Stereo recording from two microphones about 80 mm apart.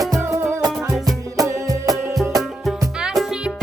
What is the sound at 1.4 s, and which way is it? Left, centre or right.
Music, right.